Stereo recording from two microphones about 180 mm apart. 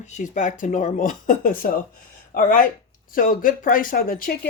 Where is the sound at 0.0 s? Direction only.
40° left (ahead or behind).